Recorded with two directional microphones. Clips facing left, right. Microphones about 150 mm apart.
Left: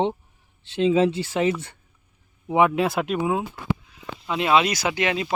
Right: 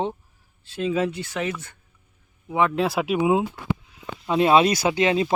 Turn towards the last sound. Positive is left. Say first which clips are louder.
# right 4 dB
turn(degrees=-25)  # may be behind; listen again after turning